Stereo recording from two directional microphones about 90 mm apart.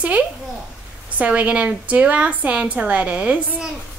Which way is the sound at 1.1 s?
15° right (ahead or behind).